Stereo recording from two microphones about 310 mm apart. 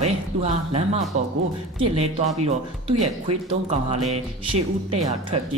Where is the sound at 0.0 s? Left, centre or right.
Centre.